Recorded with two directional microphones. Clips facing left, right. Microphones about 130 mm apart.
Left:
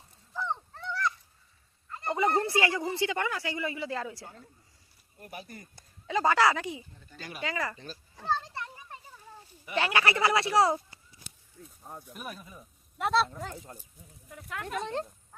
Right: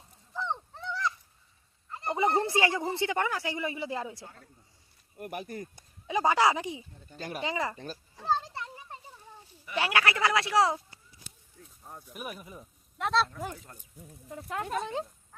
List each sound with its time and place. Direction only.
0.7 s fowl: 20° right (ahead or behind)
1.9 s speech: 20° right (ahead or behind)
5.1 s speech: 60° right (ahead or behind)
5.7 s speech: 15° right (ahead or behind)
7.1 s speech: 45° right (ahead or behind)
7.4 s speech: 20° right (ahead or behind)
8.3 s a sound: 20° right (ahead or behind)
9.7 s speech: 10° right (ahead or behind)
10.0 s speech: 5° left (ahead or behind)
12.1 s speech: 10° right (ahead or behind)
13.0 s speech: 5° left (ahead or behind)
13.7 s speech: 25° left (ahead or behind)
14.3 s speech: 30° right (ahead or behind)